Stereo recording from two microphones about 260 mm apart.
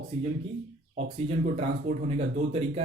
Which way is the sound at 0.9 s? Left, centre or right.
Right.